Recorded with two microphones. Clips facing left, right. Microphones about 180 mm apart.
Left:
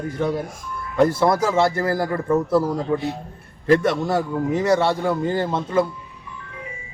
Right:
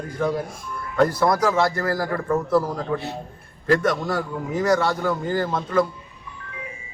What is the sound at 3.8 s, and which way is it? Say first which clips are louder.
Speech: left 2 dB; 25° left (ahead or behind).